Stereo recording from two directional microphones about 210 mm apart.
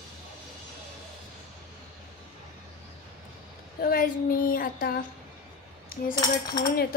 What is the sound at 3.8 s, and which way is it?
A woman's voice, 45° left (ahead or behind).